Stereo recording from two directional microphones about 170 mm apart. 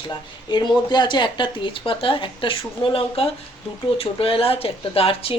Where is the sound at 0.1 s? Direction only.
25° left (ahead or behind).